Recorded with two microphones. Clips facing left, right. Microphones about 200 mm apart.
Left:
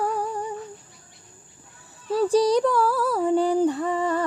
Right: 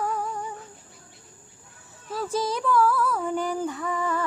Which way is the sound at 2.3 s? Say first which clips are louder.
Left 4 dB; 35° left (ahead or behind).